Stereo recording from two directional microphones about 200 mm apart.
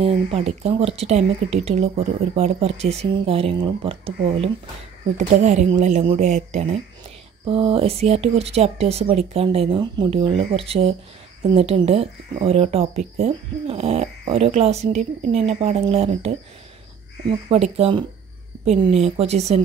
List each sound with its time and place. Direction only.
0.0 s speech: 30° right (ahead or behind)
5.1 s speech: 35° right (ahead or behind)
17.5 s speech: 30° right (ahead or behind)